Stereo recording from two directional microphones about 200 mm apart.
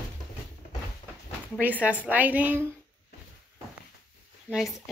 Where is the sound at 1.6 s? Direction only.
10° right (ahead or behind).